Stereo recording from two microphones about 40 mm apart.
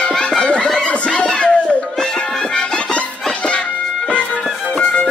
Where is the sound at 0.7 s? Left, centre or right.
Left.